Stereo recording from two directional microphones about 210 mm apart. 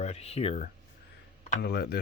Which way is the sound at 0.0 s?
30° left (ahead or behind).